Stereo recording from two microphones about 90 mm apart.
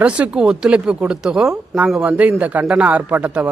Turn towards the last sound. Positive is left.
turn(degrees=-15)  # may be behind; listen again after turning